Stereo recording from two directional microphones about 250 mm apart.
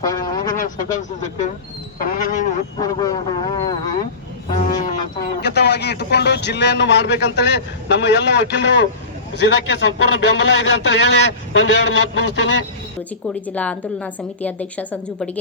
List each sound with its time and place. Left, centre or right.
0.0 s a sound: centre
0.5 s speech: left
2.0 s a sound: left
2.7 s speech: centre
5.4 s speech: left
13.2 s a woman's voice: centre